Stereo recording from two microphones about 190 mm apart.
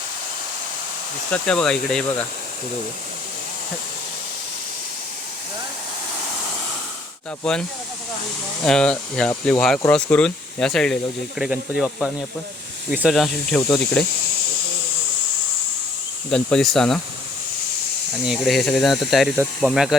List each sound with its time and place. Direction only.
1.3 s speech: 5° left (ahead or behind)
7.4 s speech: 5° left (ahead or behind)
8.6 s speech: 5° left (ahead or behind)
16.3 s speech: 5° left (ahead or behind)
18.3 s speech: centre (ahead or behind)